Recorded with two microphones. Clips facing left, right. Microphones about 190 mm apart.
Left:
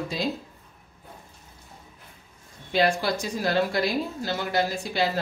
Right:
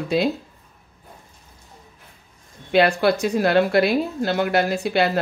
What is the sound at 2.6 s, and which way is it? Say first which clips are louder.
A woman's voice: right 6 dB; 65° right (ahead or behind).